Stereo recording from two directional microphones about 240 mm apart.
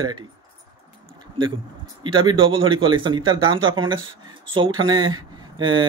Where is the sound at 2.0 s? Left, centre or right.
Centre.